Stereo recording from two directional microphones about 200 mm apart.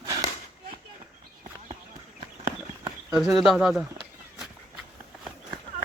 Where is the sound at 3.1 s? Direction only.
Centre (ahead or behind).